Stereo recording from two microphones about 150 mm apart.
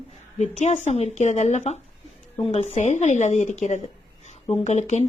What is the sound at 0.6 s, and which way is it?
Speech, 50° left (ahead or behind).